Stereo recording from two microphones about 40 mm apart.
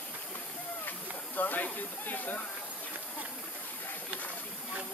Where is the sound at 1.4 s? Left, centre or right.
Left.